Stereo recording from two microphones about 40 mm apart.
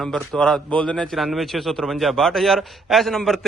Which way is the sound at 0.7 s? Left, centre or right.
Left.